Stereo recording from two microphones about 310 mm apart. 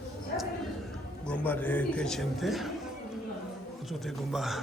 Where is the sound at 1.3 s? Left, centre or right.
Centre.